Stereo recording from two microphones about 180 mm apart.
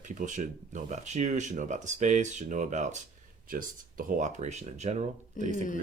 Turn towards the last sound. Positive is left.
turn(degrees=-40)  # may be behind; listen again after turning